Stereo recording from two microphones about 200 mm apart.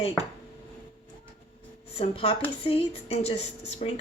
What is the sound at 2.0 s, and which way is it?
A man's voice, 30° left (ahead or behind).